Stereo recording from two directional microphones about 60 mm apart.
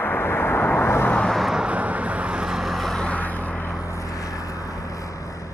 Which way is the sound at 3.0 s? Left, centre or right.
Left.